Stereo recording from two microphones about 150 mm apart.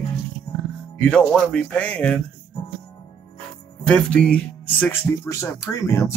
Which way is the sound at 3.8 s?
5° left (ahead or behind).